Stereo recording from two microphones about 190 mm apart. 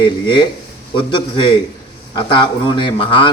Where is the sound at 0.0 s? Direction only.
25° left (ahead or behind).